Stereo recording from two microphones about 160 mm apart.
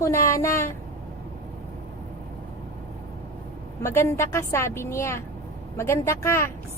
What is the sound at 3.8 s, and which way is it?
A woman's voice, 15° left (ahead or behind).